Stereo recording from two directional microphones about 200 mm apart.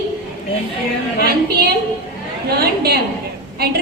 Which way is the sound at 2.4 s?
50° right (ahead or behind).